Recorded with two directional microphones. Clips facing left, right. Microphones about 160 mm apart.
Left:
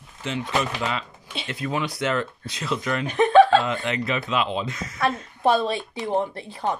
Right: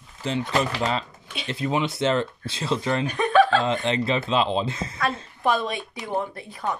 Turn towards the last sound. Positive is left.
turn(degrees=30)  # may be behind; listen again after turning